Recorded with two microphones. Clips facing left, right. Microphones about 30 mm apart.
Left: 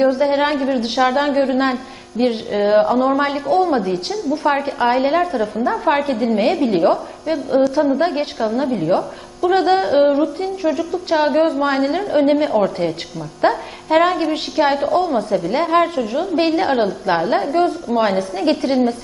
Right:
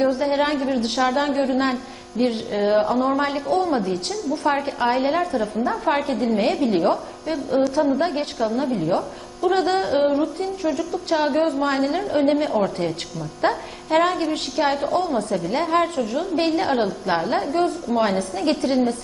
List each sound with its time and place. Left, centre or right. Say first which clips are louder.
0.0 s a man's voice: left 4 dB; centre